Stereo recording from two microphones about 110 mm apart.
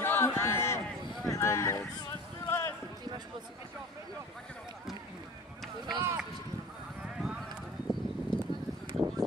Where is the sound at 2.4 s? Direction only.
25° left (ahead or behind).